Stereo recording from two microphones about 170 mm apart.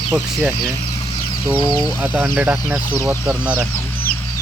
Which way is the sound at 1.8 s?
10° right (ahead or behind).